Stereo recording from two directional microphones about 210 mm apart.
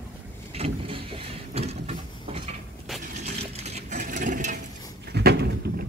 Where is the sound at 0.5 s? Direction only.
25° right (ahead or behind).